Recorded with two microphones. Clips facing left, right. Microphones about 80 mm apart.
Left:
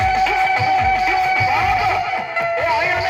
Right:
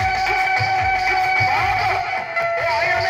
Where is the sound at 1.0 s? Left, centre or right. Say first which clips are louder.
Left 2 dB; right.